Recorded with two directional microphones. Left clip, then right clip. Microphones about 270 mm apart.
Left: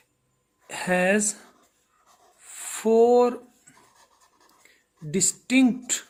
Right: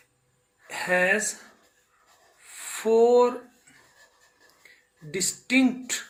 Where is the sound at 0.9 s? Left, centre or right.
Left.